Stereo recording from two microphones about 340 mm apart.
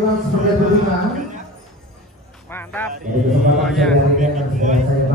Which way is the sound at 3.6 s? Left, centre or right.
Centre.